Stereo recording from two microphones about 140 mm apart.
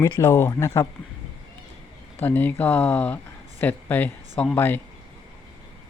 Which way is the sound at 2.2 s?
15° left (ahead or behind).